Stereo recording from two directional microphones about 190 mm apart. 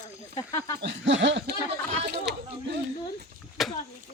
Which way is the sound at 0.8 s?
65° right (ahead or behind).